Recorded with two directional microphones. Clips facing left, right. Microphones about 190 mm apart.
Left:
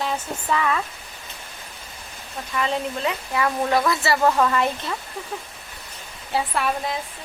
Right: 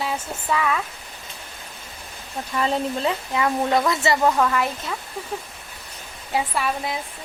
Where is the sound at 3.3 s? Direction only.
20° right (ahead or behind).